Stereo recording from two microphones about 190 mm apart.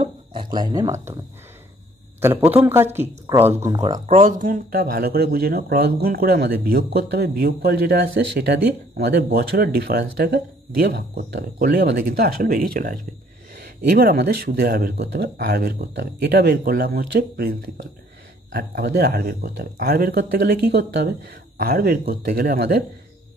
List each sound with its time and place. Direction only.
0.0 s speech: 25° right (ahead or behind)
2.2 s speech: 10° right (ahead or behind)
4.0 s speech: 40° right (ahead or behind)